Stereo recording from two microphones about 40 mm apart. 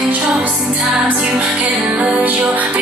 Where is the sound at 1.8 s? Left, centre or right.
Right.